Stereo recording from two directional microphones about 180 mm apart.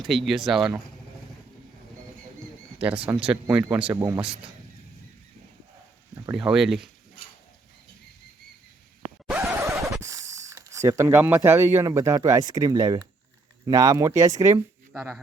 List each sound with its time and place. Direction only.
0.0 s speech: centre (ahead or behind)
2.7 s speech: 5° right (ahead or behind)
6.3 s speech: 5° right (ahead or behind)
9.3 s scratch: 10° right (ahead or behind)
10.0 s speech: 15° right (ahead or behind)